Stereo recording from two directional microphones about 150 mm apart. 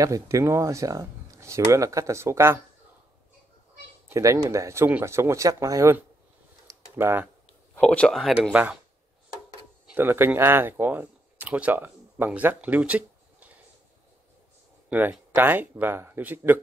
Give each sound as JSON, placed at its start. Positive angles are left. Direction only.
{"t": 0.0, "sound": "speech", "side_deg": -20}
{"t": 4.1, "sound": "speech", "side_deg": -20}
{"t": 6.7, "sound": "computer keyboard", "side_deg": -15}
{"t": 7.7, "sound": "speech", "side_deg": 10}
{"t": 8.4, "sound": "speech", "side_deg": -10}
{"t": 9.9, "sound": "speech", "side_deg": -15}
{"t": 14.9, "sound": "speech", "side_deg": -10}